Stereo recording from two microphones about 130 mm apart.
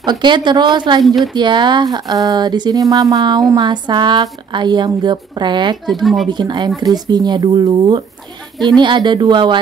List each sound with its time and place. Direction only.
0.0 s speech: 35° right (ahead or behind)
1.0 s speech: centre (ahead or behind)
1.3 s speech: 35° right (ahead or behind)